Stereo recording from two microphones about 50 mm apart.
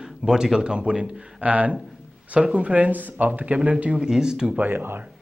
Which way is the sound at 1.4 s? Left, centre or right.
Right.